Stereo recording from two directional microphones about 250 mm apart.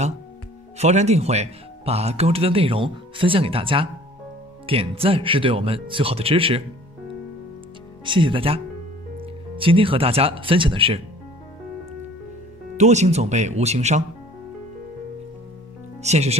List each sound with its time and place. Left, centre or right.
0.7 s speech: right
8.0 s speech: centre
12.7 s speech: right
16.0 s speech: right